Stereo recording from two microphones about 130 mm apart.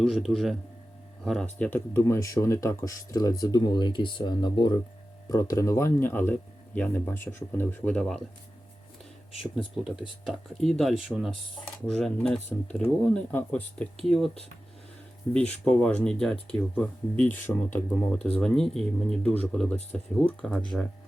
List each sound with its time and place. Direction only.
0.0 s speech: centre (ahead or behind)
9.7 s speech: 5° right (ahead or behind)
15.5 s speech: 5° left (ahead or behind)